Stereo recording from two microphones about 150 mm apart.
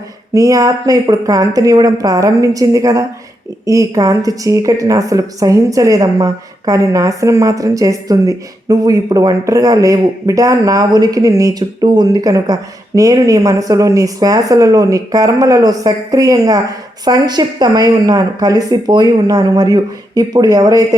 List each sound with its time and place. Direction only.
0.3 s a woman's voice: 20° right (ahead or behind)